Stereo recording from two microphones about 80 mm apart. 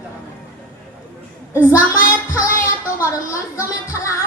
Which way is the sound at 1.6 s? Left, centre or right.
Left.